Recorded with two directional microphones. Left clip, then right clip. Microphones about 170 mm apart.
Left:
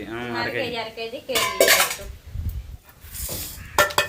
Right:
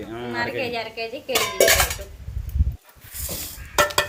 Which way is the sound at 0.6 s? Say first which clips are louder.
Right 1 dB; 30° right (ahead or behind).